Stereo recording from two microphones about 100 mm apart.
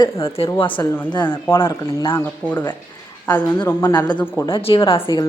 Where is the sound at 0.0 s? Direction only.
70° left (ahead or behind).